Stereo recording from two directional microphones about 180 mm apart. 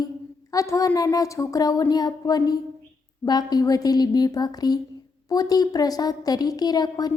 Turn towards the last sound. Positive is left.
turn(degrees=20)  # may be behind; listen again after turning